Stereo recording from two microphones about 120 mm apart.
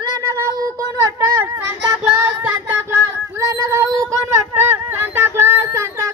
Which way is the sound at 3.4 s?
25° right (ahead or behind).